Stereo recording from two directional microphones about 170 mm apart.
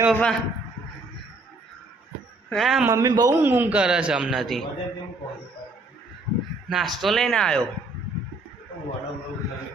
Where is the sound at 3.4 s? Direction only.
10° right (ahead or behind).